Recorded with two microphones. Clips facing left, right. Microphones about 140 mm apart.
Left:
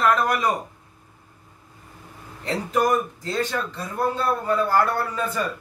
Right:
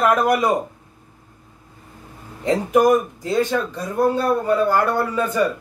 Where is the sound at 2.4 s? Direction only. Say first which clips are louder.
Right 6 dB; 15° right (ahead or behind).